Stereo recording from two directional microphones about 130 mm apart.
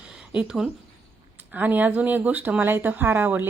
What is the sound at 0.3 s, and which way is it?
Speech, 5° right (ahead or behind).